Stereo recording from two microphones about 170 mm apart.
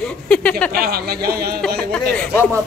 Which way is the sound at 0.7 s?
65° right (ahead or behind).